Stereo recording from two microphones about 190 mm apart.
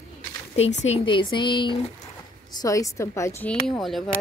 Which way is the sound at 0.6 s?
35° left (ahead or behind).